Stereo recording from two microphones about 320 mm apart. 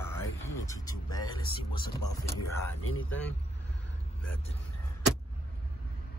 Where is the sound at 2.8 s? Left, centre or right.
Left.